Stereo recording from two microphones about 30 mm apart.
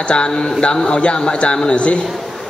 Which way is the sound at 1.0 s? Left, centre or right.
Left.